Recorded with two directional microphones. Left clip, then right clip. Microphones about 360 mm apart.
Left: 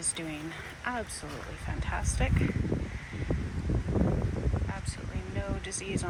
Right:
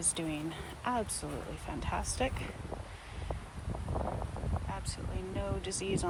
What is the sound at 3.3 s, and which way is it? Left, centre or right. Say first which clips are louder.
Wind: left 7 dB; left.